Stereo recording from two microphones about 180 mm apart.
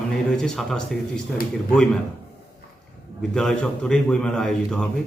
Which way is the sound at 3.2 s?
5° left (ahead or behind).